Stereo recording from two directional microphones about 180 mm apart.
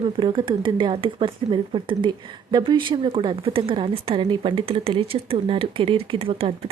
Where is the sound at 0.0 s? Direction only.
30° right (ahead or behind).